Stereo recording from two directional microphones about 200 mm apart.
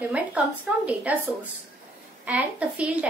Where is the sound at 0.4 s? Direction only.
5° right (ahead or behind).